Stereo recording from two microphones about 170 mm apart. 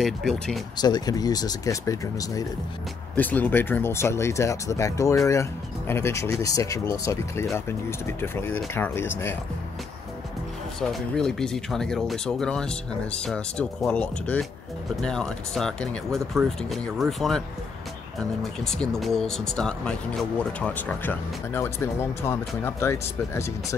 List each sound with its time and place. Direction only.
0.0 s speech: centre (ahead or behind)
0.7 s speech: 25° left (ahead or behind)
10.8 s speech: 5° left (ahead or behind)
18.4 s speech: 5° left (ahead or behind)